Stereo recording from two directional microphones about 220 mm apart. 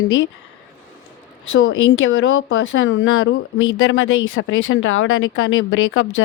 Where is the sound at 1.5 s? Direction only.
60° left (ahead or behind).